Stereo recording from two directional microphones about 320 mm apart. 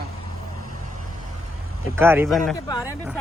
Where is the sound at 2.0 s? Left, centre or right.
Centre.